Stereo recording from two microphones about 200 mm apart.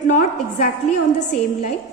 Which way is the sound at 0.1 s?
35° left (ahead or behind).